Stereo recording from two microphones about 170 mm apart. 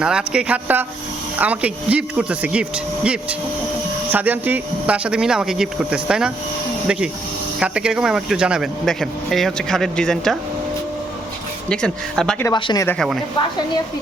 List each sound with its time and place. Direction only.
0.0 s speech: 5° right (ahead or behind)
11.7 s speech: 5° left (ahead or behind)
12.5 s speech: 25° left (ahead or behind)